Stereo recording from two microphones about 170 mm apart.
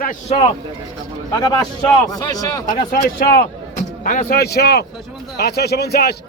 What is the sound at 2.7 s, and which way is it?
Speech, 60° left (ahead or behind).